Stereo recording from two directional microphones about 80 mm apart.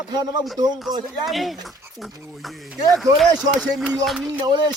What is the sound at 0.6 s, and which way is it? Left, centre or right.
Speech, right.